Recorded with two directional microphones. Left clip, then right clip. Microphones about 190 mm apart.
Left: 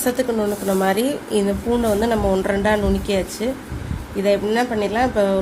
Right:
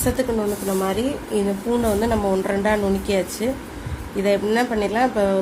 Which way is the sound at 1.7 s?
10° left (ahead or behind).